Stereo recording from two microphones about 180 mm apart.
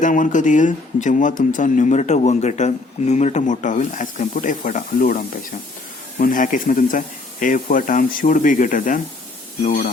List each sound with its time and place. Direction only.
0.0 s speech: 45° left (ahead or behind)